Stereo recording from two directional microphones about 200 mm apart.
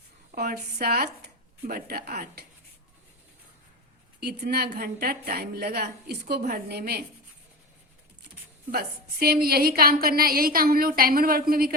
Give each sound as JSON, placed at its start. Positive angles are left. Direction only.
{"t": 0.3, "sound": "a woman's voice", "side_deg": -50}
{"t": 4.2, "sound": "a woman's voice", "side_deg": -50}
{"t": 8.7, "sound": "a woman's voice", "side_deg": -50}